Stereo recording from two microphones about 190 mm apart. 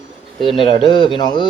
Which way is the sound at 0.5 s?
25° left (ahead or behind).